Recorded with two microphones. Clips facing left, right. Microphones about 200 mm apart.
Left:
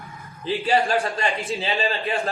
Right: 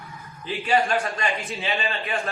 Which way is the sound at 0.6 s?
40° left (ahead or behind).